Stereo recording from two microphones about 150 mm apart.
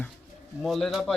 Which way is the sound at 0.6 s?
Centre (ahead or behind).